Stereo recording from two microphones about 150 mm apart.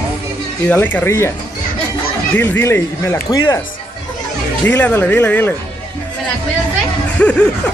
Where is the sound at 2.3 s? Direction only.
15° left (ahead or behind).